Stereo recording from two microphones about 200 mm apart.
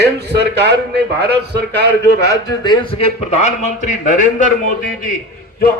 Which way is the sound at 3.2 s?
35° left (ahead or behind).